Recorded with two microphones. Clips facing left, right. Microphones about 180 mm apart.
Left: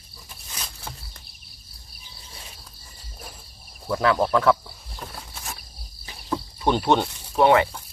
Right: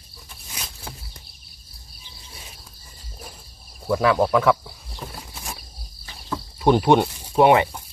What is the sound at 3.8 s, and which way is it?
Speech, 10° right (ahead or behind).